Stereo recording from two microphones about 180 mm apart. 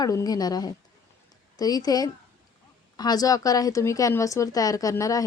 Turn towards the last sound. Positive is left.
turn(degrees=20)  # may be behind; listen again after turning